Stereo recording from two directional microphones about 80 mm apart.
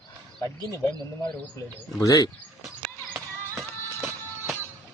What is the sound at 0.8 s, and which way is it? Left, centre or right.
Speech, left.